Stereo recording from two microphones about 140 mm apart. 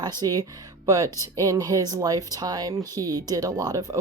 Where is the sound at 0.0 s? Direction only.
30° right (ahead or behind).